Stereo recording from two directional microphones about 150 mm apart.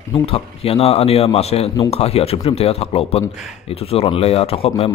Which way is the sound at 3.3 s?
5° right (ahead or behind).